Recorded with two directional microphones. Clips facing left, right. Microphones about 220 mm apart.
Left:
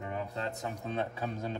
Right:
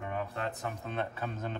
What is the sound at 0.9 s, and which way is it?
Speech, 15° left (ahead or behind).